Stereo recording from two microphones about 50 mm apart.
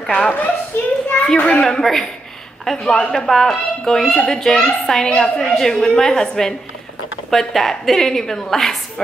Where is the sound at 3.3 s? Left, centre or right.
Centre.